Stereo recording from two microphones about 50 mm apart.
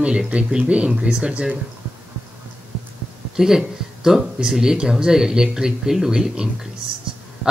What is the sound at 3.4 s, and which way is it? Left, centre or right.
Speech, centre.